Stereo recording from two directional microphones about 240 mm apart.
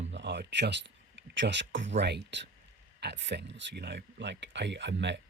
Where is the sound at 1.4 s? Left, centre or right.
Right.